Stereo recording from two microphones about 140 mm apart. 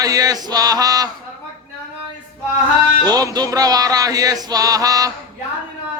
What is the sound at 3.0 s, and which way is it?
Music, 25° right (ahead or behind).